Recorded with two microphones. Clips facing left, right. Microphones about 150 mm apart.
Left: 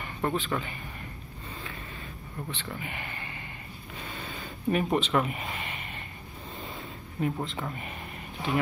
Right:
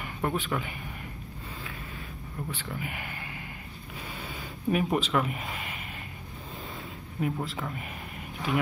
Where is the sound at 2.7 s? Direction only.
5° right (ahead or behind).